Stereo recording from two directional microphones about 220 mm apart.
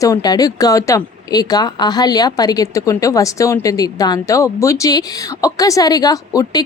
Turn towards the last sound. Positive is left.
turn(degrees=15)  # may be behind; listen again after turning